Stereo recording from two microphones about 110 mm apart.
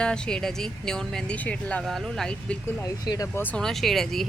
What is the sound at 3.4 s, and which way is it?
Speech, 10° left (ahead or behind).